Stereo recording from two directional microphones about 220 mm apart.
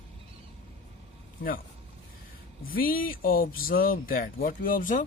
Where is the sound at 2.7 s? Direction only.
40° left (ahead or behind).